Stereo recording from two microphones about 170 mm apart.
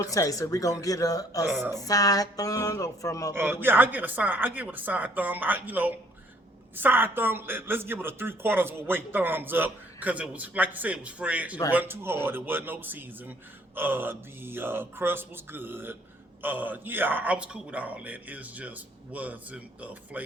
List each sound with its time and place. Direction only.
0.0 s speech: 20° left (ahead or behind)
3.3 s speech: 10° right (ahead or behind)